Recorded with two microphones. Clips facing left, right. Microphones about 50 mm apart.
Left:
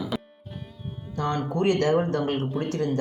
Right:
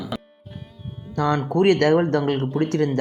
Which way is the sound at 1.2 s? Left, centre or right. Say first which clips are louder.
Right 6 dB; right.